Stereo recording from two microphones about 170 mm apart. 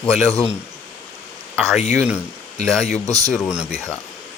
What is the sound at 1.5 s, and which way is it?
Speech, centre (ahead or behind).